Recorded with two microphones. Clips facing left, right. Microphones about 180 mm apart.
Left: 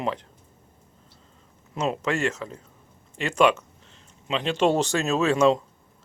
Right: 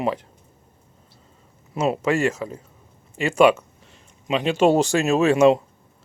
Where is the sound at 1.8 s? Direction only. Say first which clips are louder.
Right 5 dB; 10° right (ahead or behind).